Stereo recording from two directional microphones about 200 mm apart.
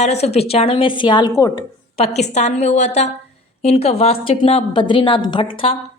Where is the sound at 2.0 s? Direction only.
30° left (ahead or behind).